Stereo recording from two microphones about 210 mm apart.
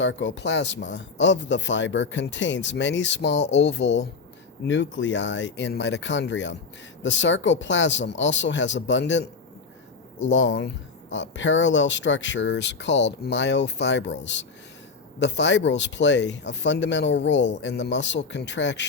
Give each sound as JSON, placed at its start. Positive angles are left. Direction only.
{"t": 0.0, "sound": "speech", "side_deg": 60}
{"t": 10.2, "sound": "speech", "side_deg": 60}